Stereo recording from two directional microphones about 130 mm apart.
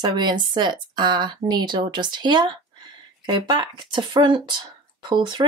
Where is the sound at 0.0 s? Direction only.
35° right (ahead or behind).